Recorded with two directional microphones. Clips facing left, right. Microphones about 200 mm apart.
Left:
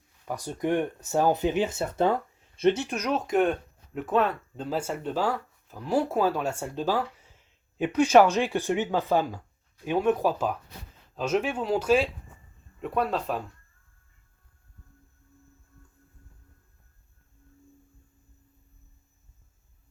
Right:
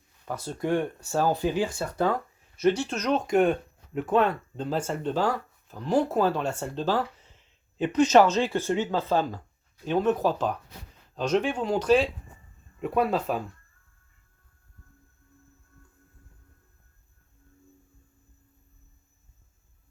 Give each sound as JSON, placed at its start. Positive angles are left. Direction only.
{"t": 0.3, "sound": "speech", "side_deg": 15}